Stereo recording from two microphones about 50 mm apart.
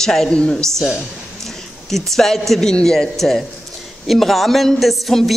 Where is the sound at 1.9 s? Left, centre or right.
Centre.